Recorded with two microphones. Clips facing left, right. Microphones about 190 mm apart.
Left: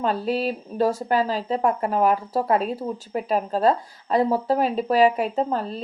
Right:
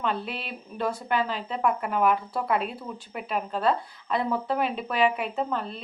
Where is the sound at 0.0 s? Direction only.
40° left (ahead or behind).